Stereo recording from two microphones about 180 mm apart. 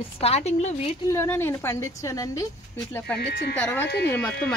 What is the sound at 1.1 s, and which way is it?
A woman's voice, 15° left (ahead or behind).